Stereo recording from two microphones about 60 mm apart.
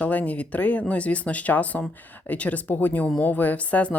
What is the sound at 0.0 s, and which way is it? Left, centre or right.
Speech, left.